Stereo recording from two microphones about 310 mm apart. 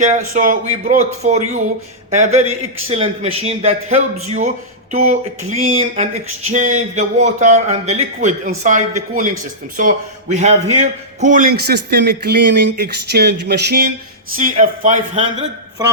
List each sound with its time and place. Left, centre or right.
0.0 s a man's voice: right